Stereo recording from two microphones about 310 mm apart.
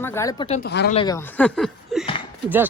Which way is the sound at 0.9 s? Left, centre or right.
Centre.